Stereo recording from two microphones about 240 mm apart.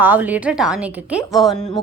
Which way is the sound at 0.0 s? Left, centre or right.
Centre.